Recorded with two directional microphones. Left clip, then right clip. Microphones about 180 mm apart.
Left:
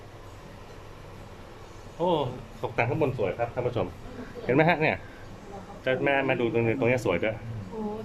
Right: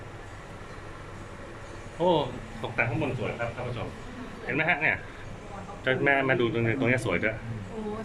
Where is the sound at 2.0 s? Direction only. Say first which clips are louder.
Right 1 dB; 5° left (ahead or behind).